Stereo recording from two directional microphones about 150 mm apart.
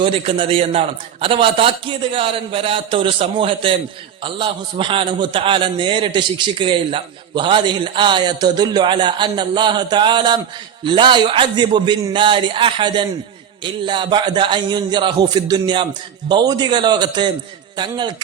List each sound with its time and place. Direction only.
0.0 s a man's voice: 35° right (ahead or behind)